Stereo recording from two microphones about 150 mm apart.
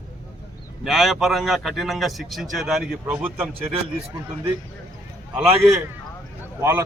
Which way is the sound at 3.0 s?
10° right (ahead or behind).